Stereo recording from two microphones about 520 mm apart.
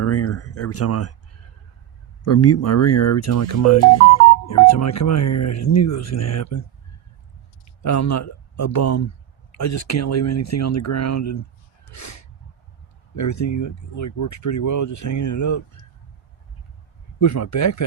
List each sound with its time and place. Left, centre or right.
0.0 s speech: left
2.2 s speech: left
7.8 s speech: left
11.9 s a sound: left
13.1 s speech: left
17.2 s speech: left